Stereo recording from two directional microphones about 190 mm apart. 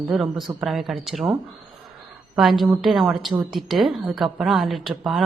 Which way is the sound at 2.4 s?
Centre (ahead or behind).